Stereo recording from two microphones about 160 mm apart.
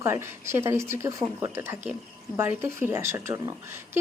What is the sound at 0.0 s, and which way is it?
Speech, 15° right (ahead or behind).